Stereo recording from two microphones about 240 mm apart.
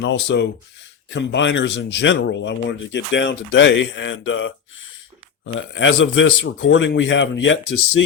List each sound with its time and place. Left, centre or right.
0.0 s speech: left
5.5 s speech: left